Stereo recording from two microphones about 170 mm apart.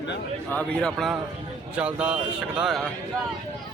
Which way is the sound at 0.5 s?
5° left (ahead or behind).